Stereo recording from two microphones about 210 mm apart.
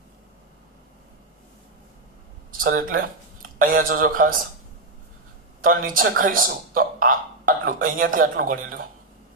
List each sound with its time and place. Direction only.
2.6 s speech: 40° right (ahead or behind)
5.6 s speech: 40° right (ahead or behind)